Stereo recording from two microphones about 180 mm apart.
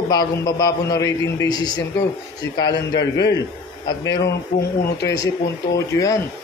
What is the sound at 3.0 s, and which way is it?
Speech, 80° left.